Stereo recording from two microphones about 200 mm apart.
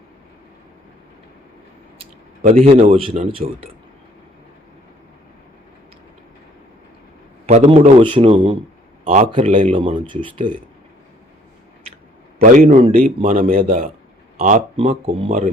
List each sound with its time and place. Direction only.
2.4 s a man's voice: 45° right (ahead or behind)
2.6 s a man's voice: 30° right (ahead or behind)
7.4 s a man's voice: 30° right (ahead or behind)
12.4 s speech: 35° right (ahead or behind)